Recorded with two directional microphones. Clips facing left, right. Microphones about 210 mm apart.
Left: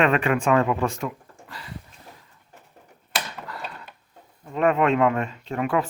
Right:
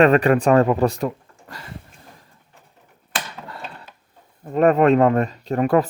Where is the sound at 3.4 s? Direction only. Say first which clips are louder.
Even; 25° right (ahead or behind).